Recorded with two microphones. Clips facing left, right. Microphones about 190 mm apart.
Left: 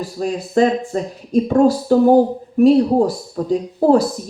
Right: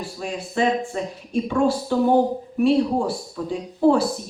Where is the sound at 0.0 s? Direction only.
40° left (ahead or behind).